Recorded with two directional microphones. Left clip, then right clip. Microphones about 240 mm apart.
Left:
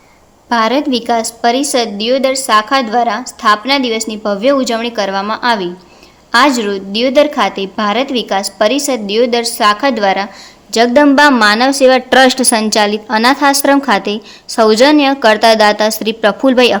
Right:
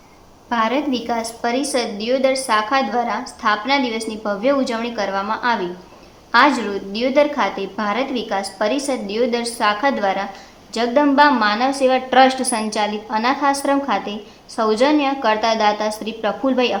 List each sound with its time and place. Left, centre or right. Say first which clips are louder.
0.5 s a woman's voice: left 7 dB; left